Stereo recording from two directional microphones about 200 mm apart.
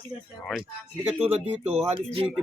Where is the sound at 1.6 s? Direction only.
30° right (ahead or behind).